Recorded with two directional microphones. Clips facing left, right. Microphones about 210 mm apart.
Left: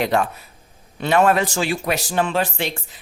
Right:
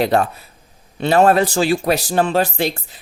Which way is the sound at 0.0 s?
35° right (ahead or behind).